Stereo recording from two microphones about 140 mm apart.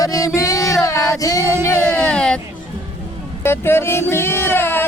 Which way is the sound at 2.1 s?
5° left (ahead or behind).